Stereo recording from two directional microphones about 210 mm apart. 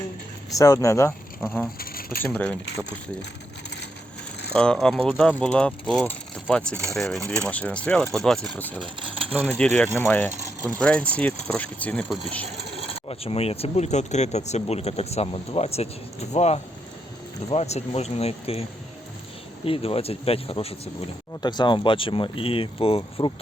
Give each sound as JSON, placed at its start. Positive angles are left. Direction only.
{"t": 0.5, "sound": "speech", "side_deg": 15}
{"t": 1.8, "sound": "coin", "side_deg": 45}
{"t": 2.2, "sound": "speech", "side_deg": 5}
{"t": 4.5, "sound": "speech", "side_deg": 5}
{"t": 8.8, "sound": "coin", "side_deg": -25}
{"t": 9.3, "sound": "speech", "side_deg": 5}
{"t": 10.4, "sound": "a sound", "side_deg": -15}
{"t": 10.8, "sound": "speech", "side_deg": 5}
{"t": 13.1, "sound": "speech", "side_deg": 30}
{"t": 19.6, "sound": "speech", "side_deg": 25}